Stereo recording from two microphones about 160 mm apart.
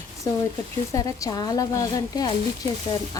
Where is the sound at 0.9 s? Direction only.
20° left (ahead or behind).